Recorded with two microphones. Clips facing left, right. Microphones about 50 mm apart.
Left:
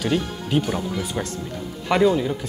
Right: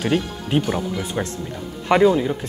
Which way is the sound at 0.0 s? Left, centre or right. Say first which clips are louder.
Right 2 dB; right.